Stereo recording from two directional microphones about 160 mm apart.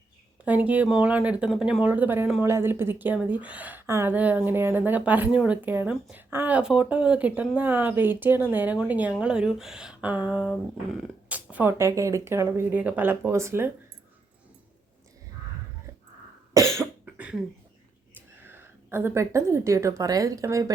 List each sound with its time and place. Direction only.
0.4 s speech: 10° right (ahead or behind)
16.7 s cough: 10° right (ahead or behind)
18.4 s speech: 15° right (ahead or behind)